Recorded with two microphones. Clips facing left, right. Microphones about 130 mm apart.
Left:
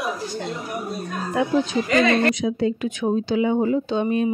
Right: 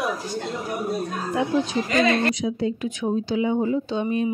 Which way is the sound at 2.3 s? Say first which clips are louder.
Left 3 dB; 55° left (ahead or behind).